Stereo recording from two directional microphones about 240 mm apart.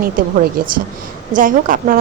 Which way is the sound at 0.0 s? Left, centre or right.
Right.